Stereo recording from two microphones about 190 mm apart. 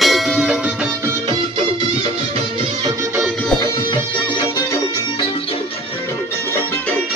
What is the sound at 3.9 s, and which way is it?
Music, 25° left (ahead or behind).